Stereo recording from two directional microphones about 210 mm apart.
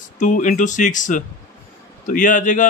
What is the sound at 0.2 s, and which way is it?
Speech, 40° left (ahead or behind).